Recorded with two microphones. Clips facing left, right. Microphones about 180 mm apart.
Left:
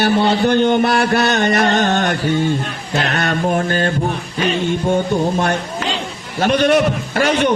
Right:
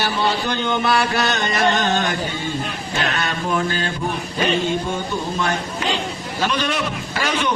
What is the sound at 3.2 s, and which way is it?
Speech, 55° left (ahead or behind).